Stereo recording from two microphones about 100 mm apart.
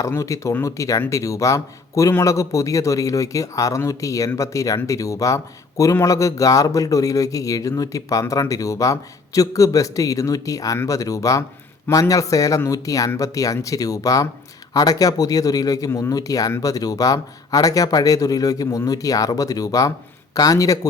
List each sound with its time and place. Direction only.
0.0 s a man's voice: 30° left (ahead or behind)